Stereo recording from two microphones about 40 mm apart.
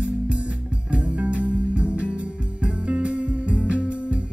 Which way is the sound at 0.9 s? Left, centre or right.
Right.